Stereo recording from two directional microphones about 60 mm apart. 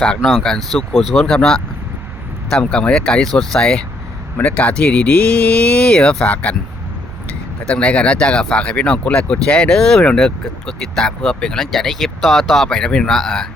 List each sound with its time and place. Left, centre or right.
0.0 s speech: centre
6.3 s speech: left
7.7 s speech: centre